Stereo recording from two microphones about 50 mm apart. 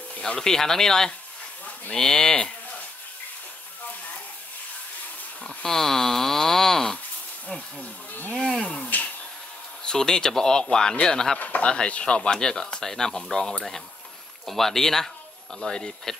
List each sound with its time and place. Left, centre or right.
0.2 s speech: centre
5.6 s a sound: centre
8.3 s a sound: centre
9.8 s speech: centre
11.3 s speech: left
11.7 s speech: centre